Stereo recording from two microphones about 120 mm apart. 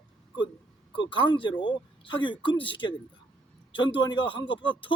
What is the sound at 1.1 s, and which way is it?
A man's voice, 45° left (ahead or behind).